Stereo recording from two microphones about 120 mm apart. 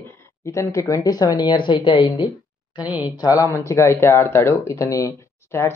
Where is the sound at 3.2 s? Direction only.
25° left (ahead or behind).